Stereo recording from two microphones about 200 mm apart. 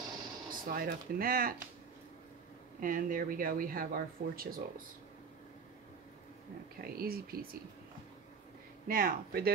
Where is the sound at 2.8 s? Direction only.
45° right (ahead or behind).